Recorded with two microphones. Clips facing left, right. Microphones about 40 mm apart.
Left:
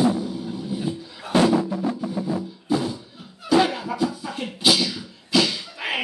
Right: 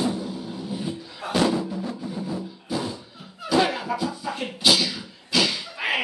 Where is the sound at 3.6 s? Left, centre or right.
Centre.